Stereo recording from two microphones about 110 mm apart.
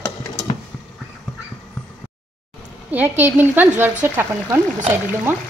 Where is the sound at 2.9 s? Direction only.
15° right (ahead or behind).